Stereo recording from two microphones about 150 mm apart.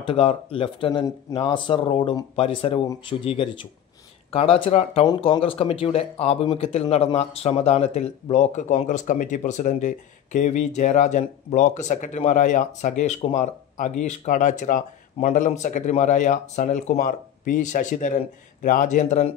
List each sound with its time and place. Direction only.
0.0 s speech: 40° left (ahead or behind)
5.0 s speech: 30° left (ahead or behind); by 19.3 s 50° left (ahead or behind)